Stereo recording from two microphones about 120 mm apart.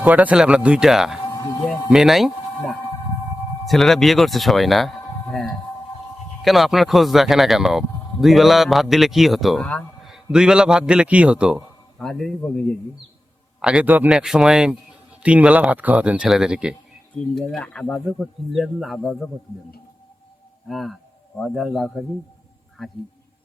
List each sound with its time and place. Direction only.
0.0 s speech: 10° right (ahead or behind)
1.2 s a sound: 20° left (ahead or behind)
1.9 s speech: 5° right (ahead or behind)
11.9 s speech: 5° left (ahead or behind)
13.6 s speech: 10° right (ahead or behind)
17.2 s speech: 10° left (ahead or behind)
20.7 s speech: centre (ahead or behind)